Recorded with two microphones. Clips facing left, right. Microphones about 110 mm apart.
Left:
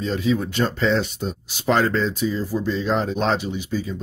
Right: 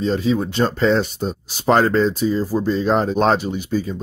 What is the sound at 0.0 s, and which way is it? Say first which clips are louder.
Speech: right 3 dB; 35° right (ahead or behind).